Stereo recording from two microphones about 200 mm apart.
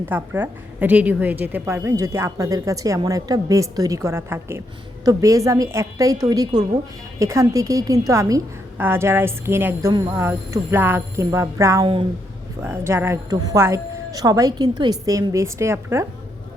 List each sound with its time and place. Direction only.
0.1 s a woman's voice: 10° right (ahead or behind)
11.8 s speech: 25° right (ahead or behind)
12.6 s a woman's voice: 10° right (ahead or behind)